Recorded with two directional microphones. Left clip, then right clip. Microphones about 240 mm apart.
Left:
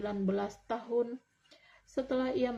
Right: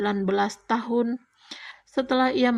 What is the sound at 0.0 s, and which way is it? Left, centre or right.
A woman's voice, right.